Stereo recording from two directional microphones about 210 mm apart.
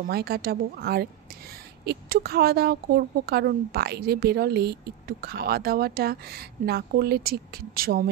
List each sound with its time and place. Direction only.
0.1 s a woman's voice: 45° right (ahead or behind)